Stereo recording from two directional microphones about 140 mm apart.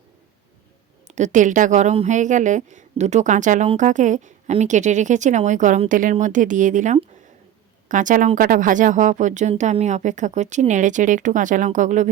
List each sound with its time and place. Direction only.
1.0 s a woman's voice: 60° right (ahead or behind)
8.4 s a woman's voice: 80° right; by 12.1 s 60° right (ahead or behind)